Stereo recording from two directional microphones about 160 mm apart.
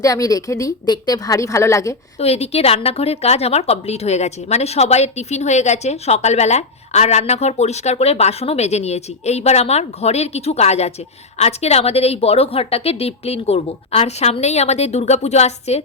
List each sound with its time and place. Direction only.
0.0 s a woman's voice: 20° left (ahead or behind)
2.1 s a woman's voice: 40° left (ahead or behind)